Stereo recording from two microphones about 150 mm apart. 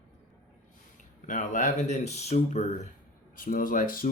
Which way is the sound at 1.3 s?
60° left (ahead or behind).